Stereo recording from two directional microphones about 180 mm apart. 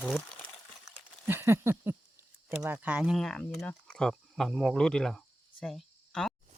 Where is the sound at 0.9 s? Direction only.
10° right (ahead or behind).